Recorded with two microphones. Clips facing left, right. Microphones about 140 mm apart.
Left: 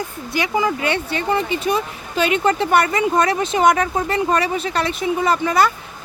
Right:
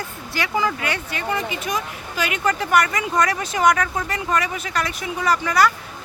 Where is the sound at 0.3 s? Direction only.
20° left (ahead or behind).